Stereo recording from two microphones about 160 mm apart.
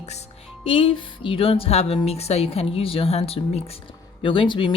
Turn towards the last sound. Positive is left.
turn(degrees=30)  # may be behind; listen again after turning